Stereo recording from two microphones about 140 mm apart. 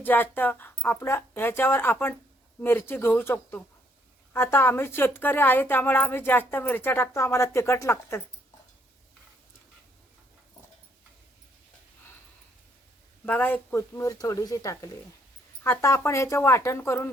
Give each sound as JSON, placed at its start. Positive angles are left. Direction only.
{"t": 0.0, "sound": "speech", "side_deg": 15}
{"t": 13.2, "sound": "speech", "side_deg": 15}